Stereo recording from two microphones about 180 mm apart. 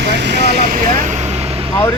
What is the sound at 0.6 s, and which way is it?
Vehicle, 45° right (ahead or behind).